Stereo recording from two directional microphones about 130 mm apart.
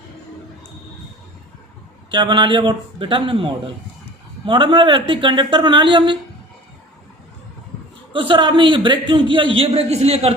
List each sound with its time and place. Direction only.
2.0 s a man's voice: 35° right (ahead or behind)
8.1 s a man's voice: 40° right (ahead or behind)